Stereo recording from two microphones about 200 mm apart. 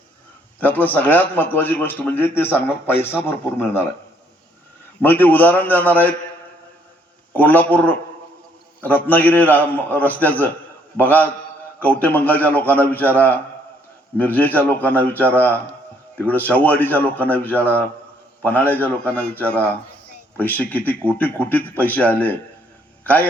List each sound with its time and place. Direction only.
0.6 s a man's voice: 10° left (ahead or behind)
5.0 s a man's voice: 10° left (ahead or behind)
7.3 s a man's voice: 10° left (ahead or behind)